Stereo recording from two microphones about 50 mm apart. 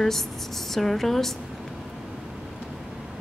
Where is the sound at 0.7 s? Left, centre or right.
Centre.